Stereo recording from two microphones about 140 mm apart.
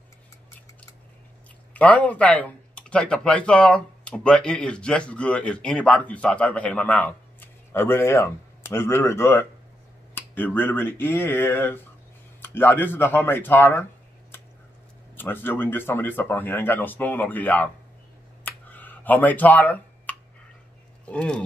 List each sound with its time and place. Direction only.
1.7 s speech: 10° left (ahead or behind)
15.1 s speech: 15° left (ahead or behind)
18.4 s finger snapping: 10° left (ahead or behind)
21.1 s speech: 10° left (ahead or behind)